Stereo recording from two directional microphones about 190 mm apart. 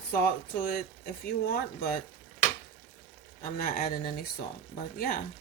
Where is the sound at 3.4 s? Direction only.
50° left (ahead or behind).